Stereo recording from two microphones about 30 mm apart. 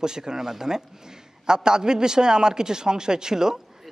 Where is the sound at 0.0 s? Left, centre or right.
Right.